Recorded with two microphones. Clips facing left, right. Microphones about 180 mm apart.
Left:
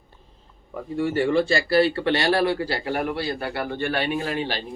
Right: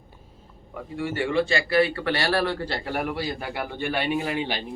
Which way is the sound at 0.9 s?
40° left (ahead or behind).